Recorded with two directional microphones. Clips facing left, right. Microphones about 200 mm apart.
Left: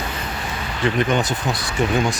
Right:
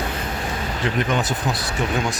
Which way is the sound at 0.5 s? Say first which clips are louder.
Right 1 dB; 40° right (ahead or behind).